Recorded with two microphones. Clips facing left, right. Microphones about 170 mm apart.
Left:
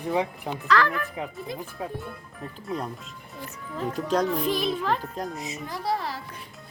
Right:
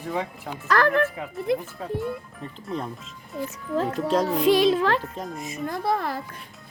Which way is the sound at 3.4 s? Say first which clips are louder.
Right 5 dB; 80° right.